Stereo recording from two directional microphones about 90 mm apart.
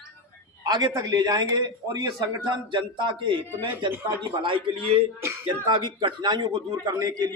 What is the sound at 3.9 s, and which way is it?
Speech, 30° right (ahead or behind).